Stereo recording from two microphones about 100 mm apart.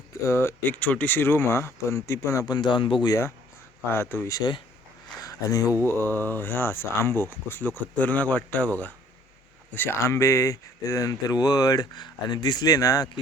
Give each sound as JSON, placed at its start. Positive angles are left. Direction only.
{"t": 0.3, "sound": "speech", "side_deg": 25}
{"t": 0.8, "sound": "speech", "side_deg": 15}
{"t": 2.6, "sound": "speech", "side_deg": 55}
{"t": 3.1, "sound": "speech", "side_deg": 30}
{"t": 4.3, "sound": "speech", "side_deg": 45}
{"t": 5.2, "sound": "a sound", "side_deg": 35}
{"t": 5.8, "sound": "speech", "side_deg": 20}
{"t": 9.7, "sound": "speech", "side_deg": 20}